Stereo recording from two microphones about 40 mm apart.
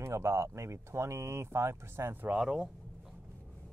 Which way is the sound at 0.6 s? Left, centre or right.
Right.